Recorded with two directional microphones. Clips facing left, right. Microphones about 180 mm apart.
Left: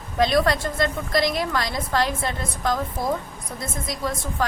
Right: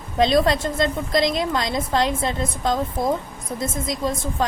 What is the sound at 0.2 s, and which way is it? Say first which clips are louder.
A woman's voice: right 2 dB; 25° right (ahead or behind).